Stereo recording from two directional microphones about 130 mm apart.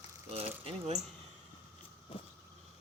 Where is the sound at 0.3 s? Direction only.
50° right (ahead or behind).